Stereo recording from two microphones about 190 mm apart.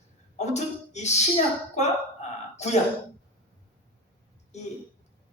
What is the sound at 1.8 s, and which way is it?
Speech, 35° left (ahead or behind).